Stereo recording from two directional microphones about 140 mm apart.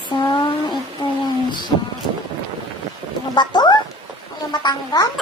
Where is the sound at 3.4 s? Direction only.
30° left (ahead or behind).